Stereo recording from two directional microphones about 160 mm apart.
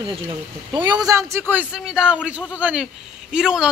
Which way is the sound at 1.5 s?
10° right (ahead or behind).